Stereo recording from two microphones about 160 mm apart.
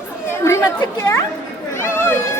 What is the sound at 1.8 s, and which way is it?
Cat, 15° left (ahead or behind).